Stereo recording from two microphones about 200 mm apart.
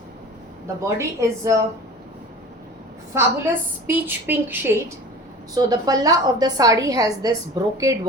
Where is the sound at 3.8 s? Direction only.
10° right (ahead or behind).